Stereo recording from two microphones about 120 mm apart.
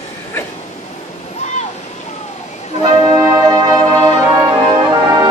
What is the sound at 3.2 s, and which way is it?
Music, 30° right (ahead or behind).